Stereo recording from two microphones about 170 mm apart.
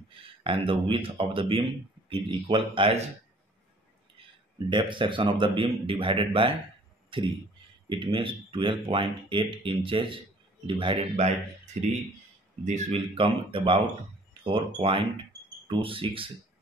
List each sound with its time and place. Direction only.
0.1 s speech: 30° right (ahead or behind)
4.6 s speech: 30° right (ahead or behind)
11.1 s speech: 40° right (ahead or behind)